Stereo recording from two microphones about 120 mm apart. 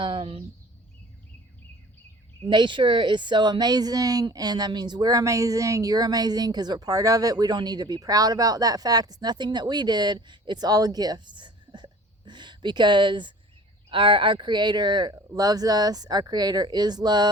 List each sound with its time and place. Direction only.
0.0 s speech: 45° right (ahead or behind)
2.5 s speech: 40° right (ahead or behind)